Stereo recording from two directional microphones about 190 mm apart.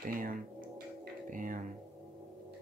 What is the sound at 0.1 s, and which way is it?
Speech, 45° right (ahead or behind).